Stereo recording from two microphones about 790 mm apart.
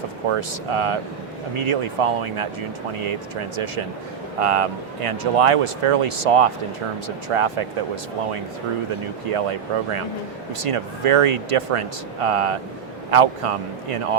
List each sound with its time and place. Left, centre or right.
0.3 s speech: right
10.6 s speech: right